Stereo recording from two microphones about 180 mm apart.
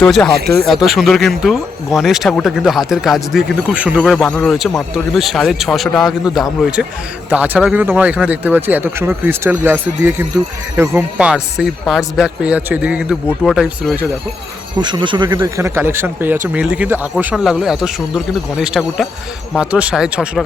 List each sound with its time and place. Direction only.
0.0 s speech: 5° left (ahead or behind)
0.3 s speech: 65° right (ahead or behind)
0.6 s speech: centre (ahead or behind)
14.8 s speech: 25° right (ahead or behind)
15.4 s speech: 15° right (ahead or behind)